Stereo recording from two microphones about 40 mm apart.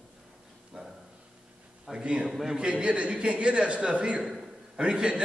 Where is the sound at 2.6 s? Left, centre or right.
Right.